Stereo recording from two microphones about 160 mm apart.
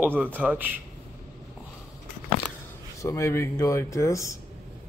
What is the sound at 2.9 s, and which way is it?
Speech, 20° left (ahead or behind).